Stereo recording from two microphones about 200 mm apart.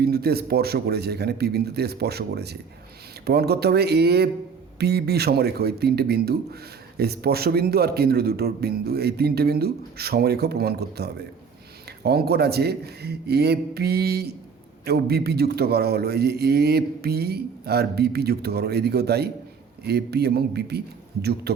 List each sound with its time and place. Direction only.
0.0 s speech: 50° right (ahead or behind)